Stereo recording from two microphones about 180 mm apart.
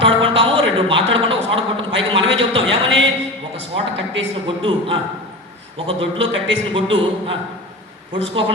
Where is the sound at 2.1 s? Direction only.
90° right.